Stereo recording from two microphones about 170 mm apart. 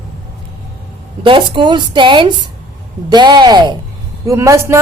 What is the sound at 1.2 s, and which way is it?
A woman's voice, 30° right (ahead or behind).